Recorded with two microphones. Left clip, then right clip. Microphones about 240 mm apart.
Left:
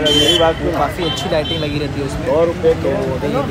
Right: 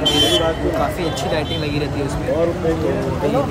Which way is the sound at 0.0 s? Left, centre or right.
Centre.